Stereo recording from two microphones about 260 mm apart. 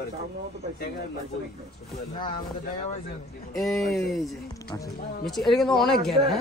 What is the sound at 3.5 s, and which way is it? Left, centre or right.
Speech, centre.